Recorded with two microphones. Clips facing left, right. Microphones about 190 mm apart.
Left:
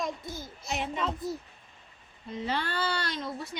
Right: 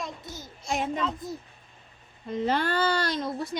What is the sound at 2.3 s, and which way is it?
Speech, 45° right (ahead or behind).